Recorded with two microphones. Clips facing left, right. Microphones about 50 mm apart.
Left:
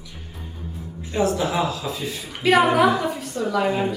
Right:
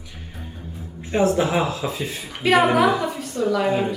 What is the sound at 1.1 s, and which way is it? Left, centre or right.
Speech, right.